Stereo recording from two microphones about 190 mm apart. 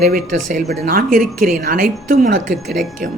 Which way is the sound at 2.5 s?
Centre (ahead or behind).